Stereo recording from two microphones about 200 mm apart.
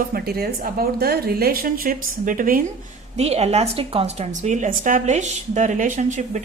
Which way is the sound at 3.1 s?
30° right (ahead or behind).